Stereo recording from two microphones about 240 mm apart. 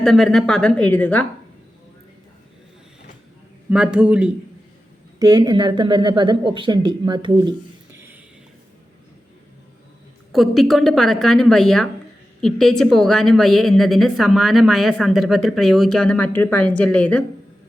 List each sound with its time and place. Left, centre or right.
0.0 s a woman's voice: centre
3.7 s a woman's voice: centre
5.2 s a woman's voice: centre
10.3 s a woman's voice: centre